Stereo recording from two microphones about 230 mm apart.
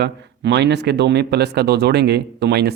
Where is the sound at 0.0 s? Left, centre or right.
Right.